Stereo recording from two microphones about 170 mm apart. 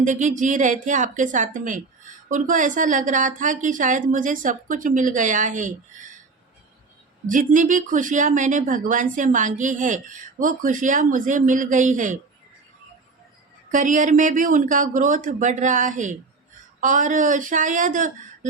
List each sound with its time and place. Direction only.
0.0 s speech: 45° right (ahead or behind)
7.3 s speech: 50° right (ahead or behind)
13.7 s speech: 50° right (ahead or behind)